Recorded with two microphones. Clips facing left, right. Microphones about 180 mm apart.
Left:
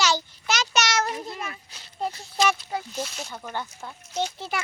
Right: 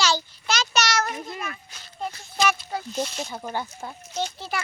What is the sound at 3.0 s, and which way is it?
Speech, centre (ahead or behind).